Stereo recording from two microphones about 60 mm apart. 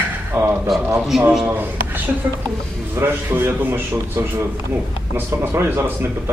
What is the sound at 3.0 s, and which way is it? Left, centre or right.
A man's voice, right.